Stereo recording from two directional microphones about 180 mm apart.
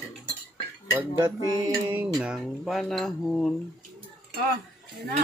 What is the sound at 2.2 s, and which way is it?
Speech, 5° right (ahead or behind).